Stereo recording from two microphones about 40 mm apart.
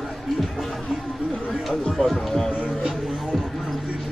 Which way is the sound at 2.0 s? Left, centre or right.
Centre.